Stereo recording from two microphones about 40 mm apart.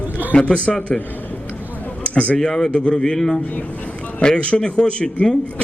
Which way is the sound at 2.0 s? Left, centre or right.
Left.